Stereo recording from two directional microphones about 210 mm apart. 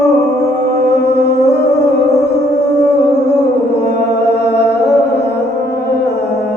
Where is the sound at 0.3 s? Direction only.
55° left (ahead or behind).